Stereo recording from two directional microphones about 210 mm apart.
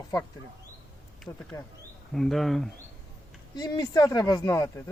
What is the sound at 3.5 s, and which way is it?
Speech, 20° left (ahead or behind).